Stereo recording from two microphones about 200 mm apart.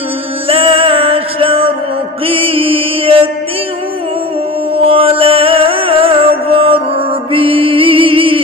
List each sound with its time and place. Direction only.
0.5 s music: 25° right (ahead or behind)
2.2 s mantra: 30° right (ahead or behind)
4.7 s music: 30° right (ahead or behind)